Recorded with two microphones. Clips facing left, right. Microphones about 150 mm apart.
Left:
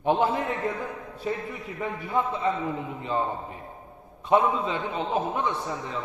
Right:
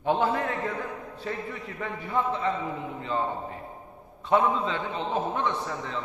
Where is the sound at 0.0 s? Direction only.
20° left (ahead or behind).